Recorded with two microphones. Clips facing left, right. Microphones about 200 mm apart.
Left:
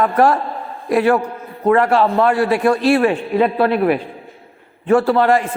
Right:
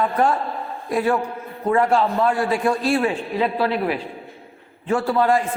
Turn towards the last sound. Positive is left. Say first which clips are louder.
# left 5 dB
turn(degrees=70)  # may be behind; listen again after turning